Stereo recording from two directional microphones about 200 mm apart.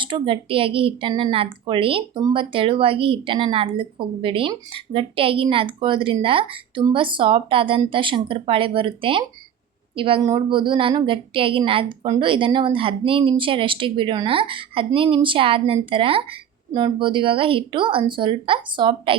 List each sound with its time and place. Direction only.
0.0 s a woman's voice: 25° right (ahead or behind)